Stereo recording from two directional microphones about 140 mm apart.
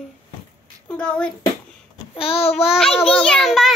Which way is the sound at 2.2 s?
45° left (ahead or behind).